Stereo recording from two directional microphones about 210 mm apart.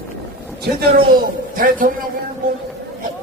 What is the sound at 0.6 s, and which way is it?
A man's voice, 45° right (ahead or behind).